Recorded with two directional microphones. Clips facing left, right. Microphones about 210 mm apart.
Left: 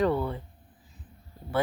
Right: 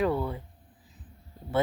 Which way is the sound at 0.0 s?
10° right (ahead or behind).